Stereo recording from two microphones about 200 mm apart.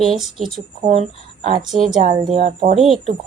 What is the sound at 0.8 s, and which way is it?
Speech, 35° right (ahead or behind).